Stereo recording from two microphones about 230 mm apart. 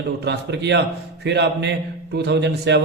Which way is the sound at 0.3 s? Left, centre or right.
Right.